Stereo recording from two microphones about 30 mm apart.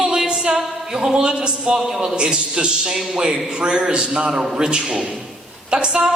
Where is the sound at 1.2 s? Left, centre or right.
Right.